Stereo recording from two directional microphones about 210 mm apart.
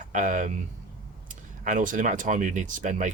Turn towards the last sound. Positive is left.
turn(degrees=-35)  # may be behind; listen again after turning